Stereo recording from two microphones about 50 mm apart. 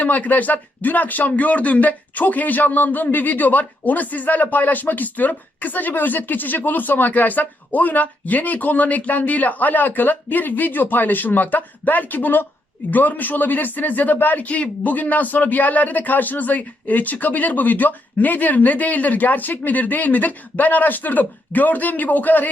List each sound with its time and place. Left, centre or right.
0.0 s speech: left